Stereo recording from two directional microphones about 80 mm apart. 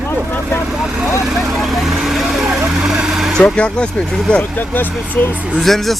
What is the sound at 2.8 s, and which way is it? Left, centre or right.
Vehicle, centre.